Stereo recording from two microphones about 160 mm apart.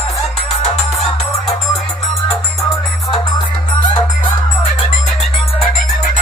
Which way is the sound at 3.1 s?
30° left (ahead or behind).